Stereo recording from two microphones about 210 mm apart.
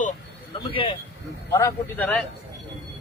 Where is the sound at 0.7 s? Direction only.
25° left (ahead or behind).